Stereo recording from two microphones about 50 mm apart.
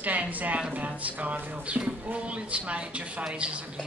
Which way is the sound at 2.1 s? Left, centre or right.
Right.